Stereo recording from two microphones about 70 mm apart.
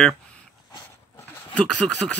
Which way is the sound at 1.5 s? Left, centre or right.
Centre.